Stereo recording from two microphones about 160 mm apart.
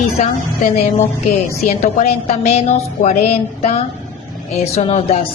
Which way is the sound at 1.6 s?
50° left (ahead or behind).